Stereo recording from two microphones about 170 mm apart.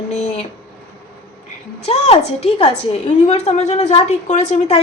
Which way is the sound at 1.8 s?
40° left (ahead or behind).